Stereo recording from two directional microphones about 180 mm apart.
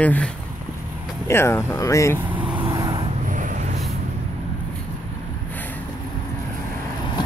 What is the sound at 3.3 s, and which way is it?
Vehicle, 45° right (ahead or behind).